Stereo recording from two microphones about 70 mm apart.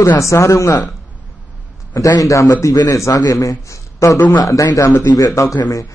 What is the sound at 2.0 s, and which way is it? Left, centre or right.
A man's voice, left.